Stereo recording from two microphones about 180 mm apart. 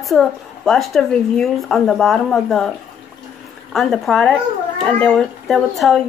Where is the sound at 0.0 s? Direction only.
Centre (ahead or behind).